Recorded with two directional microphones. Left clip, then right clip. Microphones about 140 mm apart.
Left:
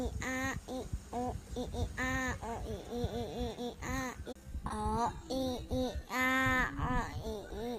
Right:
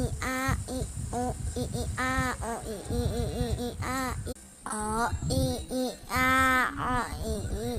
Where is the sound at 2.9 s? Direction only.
60° right (ahead or behind).